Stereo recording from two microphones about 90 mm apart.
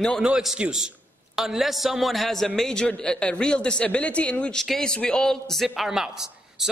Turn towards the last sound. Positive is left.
turn(degrees=-5)  # may be behind; listen again after turning